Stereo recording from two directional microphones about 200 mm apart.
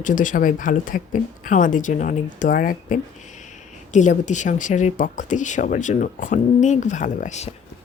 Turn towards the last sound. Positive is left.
turn(degrees=35)  # may be behind; listen again after turning